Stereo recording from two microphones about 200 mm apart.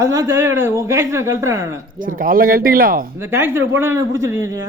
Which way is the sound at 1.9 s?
45° right (ahead or behind).